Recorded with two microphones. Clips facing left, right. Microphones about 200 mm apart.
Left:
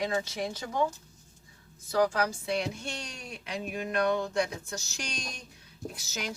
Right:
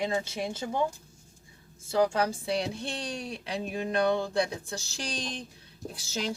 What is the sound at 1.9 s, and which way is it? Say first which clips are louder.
Speech: right 1 dB; 25° right (ahead or behind).